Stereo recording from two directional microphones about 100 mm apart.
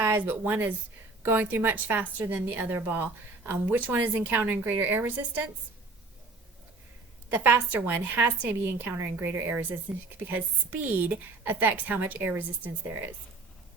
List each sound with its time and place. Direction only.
0.0 s a woman's voice: 20° right (ahead or behind)
7.3 s a woman's voice: 20° right (ahead or behind)